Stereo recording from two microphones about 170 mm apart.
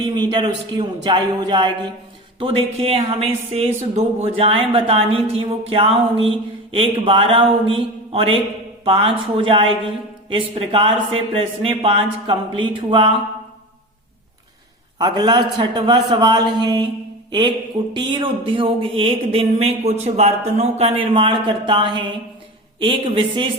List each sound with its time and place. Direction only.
0.0 s a man's voice: 25° right (ahead or behind)
14.9 s a man's voice: 25° right (ahead or behind)
17.9 s a man's voice: 30° right (ahead or behind)